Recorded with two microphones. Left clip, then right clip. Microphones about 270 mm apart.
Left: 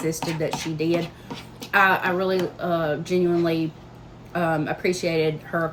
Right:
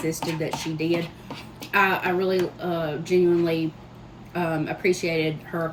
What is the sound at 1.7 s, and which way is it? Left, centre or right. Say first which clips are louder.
Speech: left 2 dB; centre.